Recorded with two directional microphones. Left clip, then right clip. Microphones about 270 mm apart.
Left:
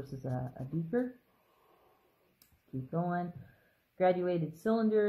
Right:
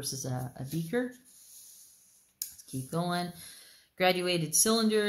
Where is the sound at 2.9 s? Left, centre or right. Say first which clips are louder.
Right 3 dB; right.